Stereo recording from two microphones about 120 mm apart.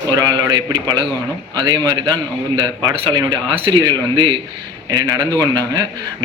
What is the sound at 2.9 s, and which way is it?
Speech, 45° right (ahead or behind).